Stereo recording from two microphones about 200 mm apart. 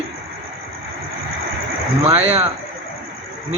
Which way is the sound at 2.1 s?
30° right (ahead or behind).